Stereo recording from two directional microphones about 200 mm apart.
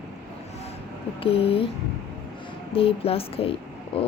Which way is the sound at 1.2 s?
30° left (ahead or behind).